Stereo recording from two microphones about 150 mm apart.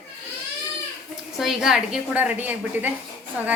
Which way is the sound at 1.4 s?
5° right (ahead or behind).